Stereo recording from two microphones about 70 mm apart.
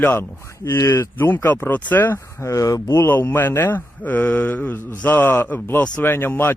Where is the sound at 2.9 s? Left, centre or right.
Left.